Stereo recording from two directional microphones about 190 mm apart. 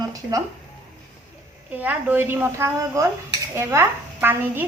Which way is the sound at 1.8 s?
10° right (ahead or behind).